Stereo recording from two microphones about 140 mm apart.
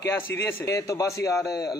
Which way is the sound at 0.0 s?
15° left (ahead or behind).